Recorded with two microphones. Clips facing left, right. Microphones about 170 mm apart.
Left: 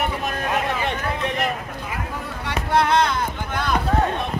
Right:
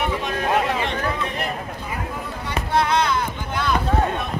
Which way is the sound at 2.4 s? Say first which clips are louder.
Left 1 dB; 60° left (ahead or behind).